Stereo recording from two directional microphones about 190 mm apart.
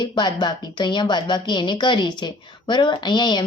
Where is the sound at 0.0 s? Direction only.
25° left (ahead or behind).